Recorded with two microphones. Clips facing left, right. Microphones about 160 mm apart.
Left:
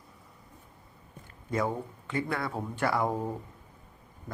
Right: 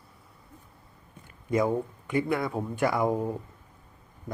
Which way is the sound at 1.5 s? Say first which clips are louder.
Right 5 dB; 15° right (ahead or behind).